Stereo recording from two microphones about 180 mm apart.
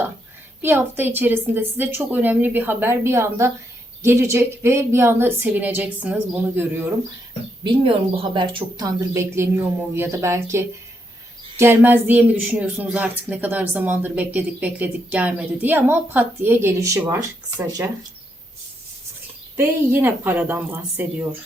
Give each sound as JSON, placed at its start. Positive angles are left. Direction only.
{"t": 0.6, "sound": "speech", "side_deg": -10}
{"t": 7.6, "sound": "speech", "side_deg": -30}
{"t": 19.5, "sound": "speech", "side_deg": -10}